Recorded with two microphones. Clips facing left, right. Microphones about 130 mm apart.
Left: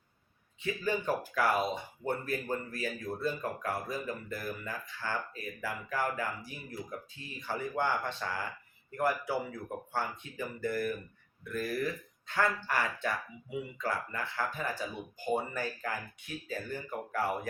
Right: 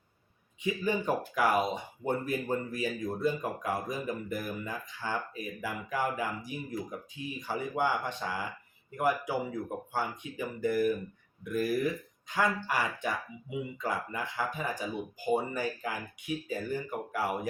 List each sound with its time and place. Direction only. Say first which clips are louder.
0.6 s speech: right 2 dB; 15° right (ahead or behind)